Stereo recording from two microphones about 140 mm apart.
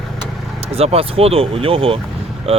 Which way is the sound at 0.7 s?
45° right (ahead or behind).